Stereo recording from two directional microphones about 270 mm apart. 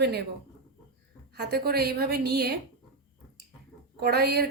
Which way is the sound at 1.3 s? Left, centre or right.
Right.